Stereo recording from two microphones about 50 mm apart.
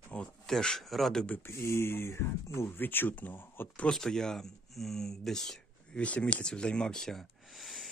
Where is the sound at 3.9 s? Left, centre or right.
Centre.